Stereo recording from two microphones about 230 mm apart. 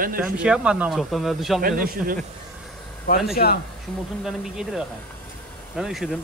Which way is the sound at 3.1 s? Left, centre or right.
Left.